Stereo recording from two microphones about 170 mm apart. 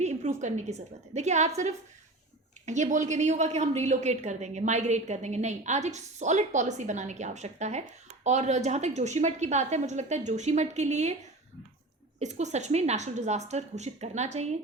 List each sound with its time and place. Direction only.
0.0 s a woman's voice: 45° right (ahead or behind)
12.2 s a woman's voice: 45° right (ahead or behind)